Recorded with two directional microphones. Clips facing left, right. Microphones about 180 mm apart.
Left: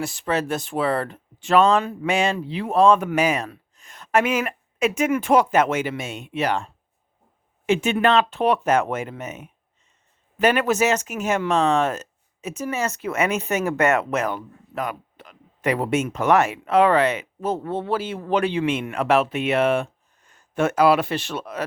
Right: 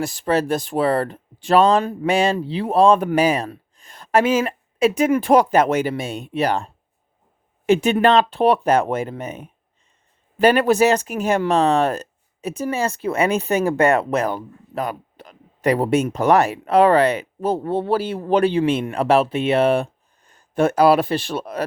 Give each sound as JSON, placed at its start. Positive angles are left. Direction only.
{"t": 0.0, "sound": "speech", "side_deg": -40}
{"t": 7.7, "sound": "speech", "side_deg": -35}